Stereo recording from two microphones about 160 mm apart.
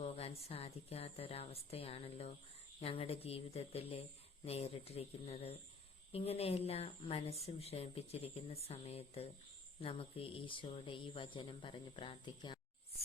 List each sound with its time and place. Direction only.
0.0 s speech: 40° left (ahead or behind)